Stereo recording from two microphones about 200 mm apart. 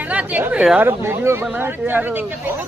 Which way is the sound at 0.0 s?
5° right (ahead or behind).